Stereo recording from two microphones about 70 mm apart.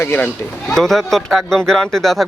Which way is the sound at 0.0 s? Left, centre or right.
Left.